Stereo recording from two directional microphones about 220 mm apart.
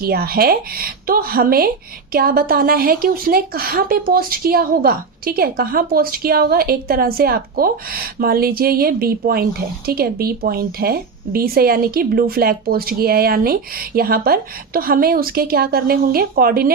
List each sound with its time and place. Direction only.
0.0 s a woman's voice: 45° right (ahead or behind)